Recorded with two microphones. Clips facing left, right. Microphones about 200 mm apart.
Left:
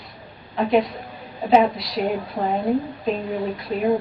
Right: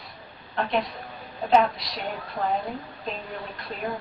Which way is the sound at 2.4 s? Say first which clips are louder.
Left 1 dB; 30° left (ahead or behind).